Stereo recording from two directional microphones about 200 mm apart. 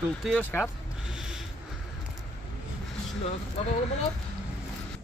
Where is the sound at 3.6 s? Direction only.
30° left (ahead or behind).